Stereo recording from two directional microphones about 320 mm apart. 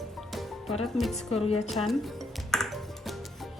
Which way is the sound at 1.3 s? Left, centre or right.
Centre.